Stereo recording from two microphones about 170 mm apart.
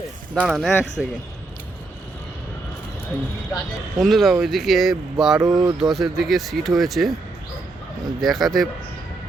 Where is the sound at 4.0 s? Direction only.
Centre (ahead or behind).